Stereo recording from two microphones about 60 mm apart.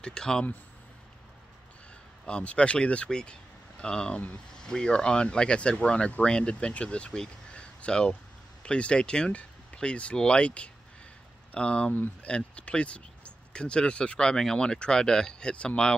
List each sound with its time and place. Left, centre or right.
0.0 s speech: centre
2.2 s speech: centre
11.9 s speech: left
12.3 s speech: centre